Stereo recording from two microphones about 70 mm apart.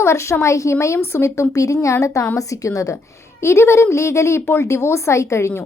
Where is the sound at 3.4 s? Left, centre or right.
Left.